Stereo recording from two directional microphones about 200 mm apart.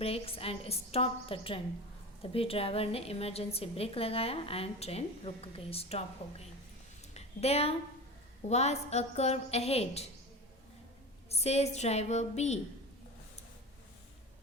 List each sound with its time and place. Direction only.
0.0 s a woman's voice: 30° left (ahead or behind)
7.1 s a sound: 30° left (ahead or behind)
8.4 s a woman's voice: 35° left (ahead or behind)
11.3 s a woman's voice: 30° left (ahead or behind)